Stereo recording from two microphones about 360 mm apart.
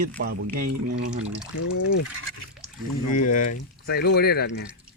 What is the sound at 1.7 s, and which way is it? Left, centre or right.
Speech, left.